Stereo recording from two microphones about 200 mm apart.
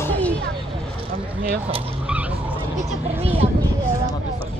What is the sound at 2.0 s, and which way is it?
Skidding, 5° right (ahead or behind).